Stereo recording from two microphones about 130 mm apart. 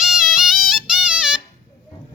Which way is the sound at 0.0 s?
5° right (ahead or behind).